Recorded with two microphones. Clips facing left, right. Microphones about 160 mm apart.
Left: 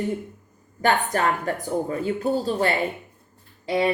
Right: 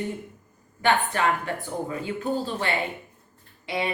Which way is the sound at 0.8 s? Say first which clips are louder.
Left 1 dB; 40° left (ahead or behind).